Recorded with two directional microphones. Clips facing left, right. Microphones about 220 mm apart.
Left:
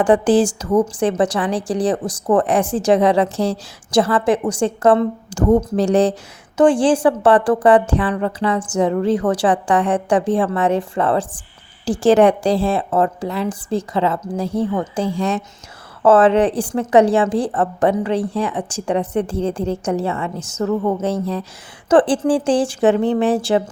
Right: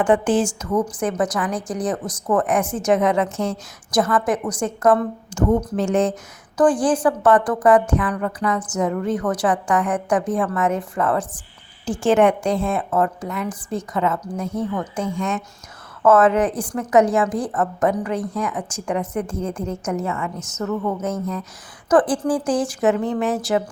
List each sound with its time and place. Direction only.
0.0 s a woman's voice: 35° left (ahead or behind)